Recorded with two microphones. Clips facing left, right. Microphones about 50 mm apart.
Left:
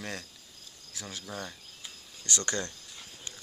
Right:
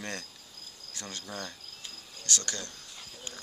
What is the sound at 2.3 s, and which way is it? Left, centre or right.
Speech, left.